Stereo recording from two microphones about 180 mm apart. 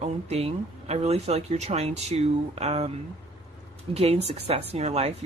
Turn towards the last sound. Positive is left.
turn(degrees=-35)  # may be behind; listen again after turning